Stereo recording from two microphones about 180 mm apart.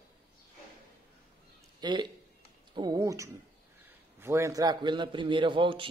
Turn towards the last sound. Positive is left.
turn(degrees=-30)  # may be behind; listen again after turning